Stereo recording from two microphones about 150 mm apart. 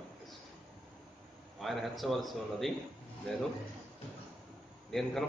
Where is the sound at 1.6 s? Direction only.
Centre (ahead or behind).